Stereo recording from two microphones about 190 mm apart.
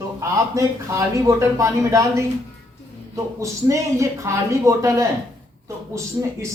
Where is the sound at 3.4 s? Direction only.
15° right (ahead or behind).